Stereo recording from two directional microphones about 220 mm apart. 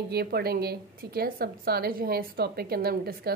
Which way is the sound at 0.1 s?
45° right (ahead or behind).